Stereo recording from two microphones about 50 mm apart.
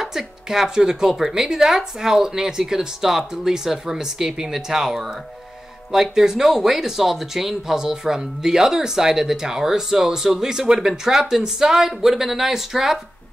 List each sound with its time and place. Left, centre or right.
0.0 s speech: centre